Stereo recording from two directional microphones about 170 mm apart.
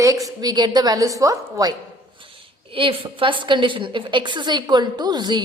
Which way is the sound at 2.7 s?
30° right (ahead or behind).